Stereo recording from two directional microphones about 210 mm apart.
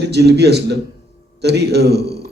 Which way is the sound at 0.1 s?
50° right (ahead or behind).